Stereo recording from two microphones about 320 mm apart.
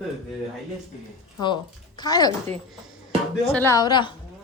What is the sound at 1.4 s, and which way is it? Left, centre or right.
Speech, centre.